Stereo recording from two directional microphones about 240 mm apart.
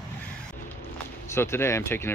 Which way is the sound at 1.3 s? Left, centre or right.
Centre.